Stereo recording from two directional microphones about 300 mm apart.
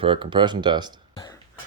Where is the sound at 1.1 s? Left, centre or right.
Centre.